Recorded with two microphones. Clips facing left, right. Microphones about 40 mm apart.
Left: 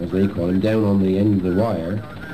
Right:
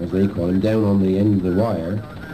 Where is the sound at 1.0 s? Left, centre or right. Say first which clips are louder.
Even; left.